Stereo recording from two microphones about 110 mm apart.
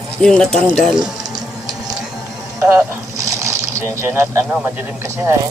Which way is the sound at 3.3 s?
25° right (ahead or behind).